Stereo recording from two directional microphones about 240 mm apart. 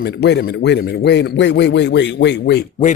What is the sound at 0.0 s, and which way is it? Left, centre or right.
A man's voice, left.